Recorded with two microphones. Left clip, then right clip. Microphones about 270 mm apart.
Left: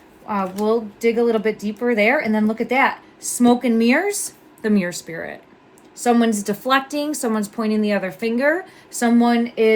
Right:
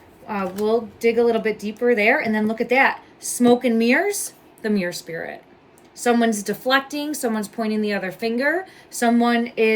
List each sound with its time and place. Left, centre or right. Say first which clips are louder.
0.3 s speech: left 1 dB; centre